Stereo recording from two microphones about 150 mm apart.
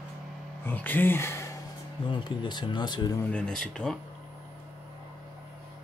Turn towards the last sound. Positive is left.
turn(degrees=5)  # may be behind; listen again after turning